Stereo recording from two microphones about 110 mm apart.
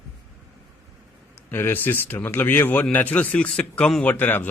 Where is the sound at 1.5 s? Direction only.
20° left (ahead or behind).